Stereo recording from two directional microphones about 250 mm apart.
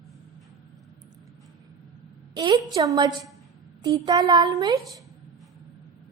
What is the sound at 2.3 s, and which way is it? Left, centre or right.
A woman's voice, centre.